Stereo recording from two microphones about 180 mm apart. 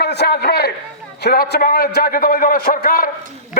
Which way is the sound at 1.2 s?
65° left (ahead or behind).